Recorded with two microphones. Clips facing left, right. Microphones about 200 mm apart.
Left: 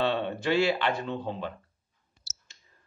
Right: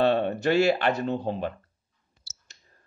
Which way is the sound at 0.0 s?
45° right (ahead or behind).